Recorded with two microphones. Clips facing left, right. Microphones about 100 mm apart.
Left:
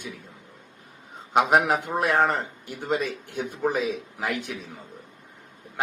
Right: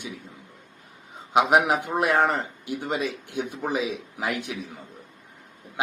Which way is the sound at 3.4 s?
5° right (ahead or behind).